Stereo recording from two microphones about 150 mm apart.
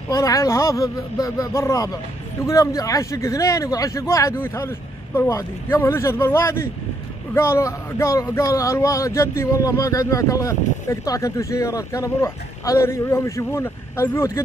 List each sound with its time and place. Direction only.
0.1 s speech: 20° left (ahead or behind)